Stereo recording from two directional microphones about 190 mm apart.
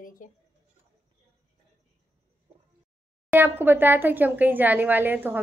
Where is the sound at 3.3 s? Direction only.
10° right (ahead or behind).